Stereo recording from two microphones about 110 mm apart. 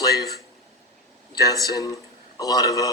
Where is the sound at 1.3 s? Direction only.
35° left (ahead or behind).